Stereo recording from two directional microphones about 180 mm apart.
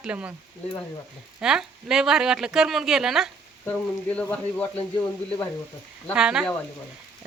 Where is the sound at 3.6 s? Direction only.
10° left (ahead or behind).